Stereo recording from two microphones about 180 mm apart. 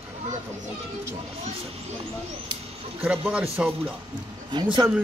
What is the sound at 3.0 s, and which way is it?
A man's voice, 10° right (ahead or behind).